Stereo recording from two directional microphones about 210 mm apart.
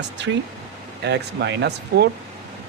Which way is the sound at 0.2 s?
55° right (ahead or behind).